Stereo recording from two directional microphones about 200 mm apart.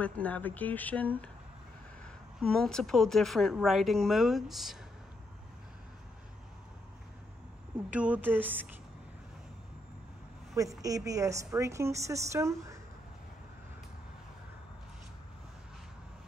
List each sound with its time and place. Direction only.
0.0 s speech: 5° left (ahead or behind)
2.4 s speech: centre (ahead or behind)
7.9 s a woman's voice: 5° right (ahead or behind)
10.6 s a woman's voice: 15° right (ahead or behind)